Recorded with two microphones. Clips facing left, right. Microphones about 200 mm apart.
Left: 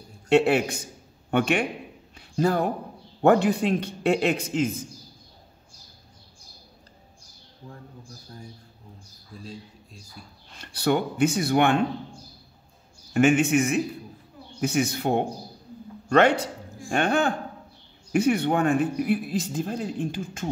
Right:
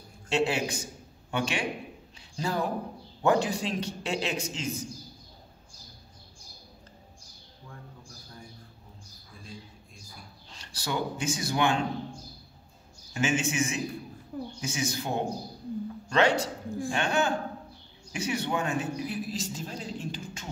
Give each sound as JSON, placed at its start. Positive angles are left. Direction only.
{"t": 0.3, "sound": "speech", "side_deg": 60}
{"t": 2.1, "sound": "a sound", "side_deg": 55}
{"t": 3.2, "sound": "speech", "side_deg": 60}
{"t": 10.5, "sound": "speech", "side_deg": 60}
{"t": 13.1, "sound": "speech", "side_deg": 60}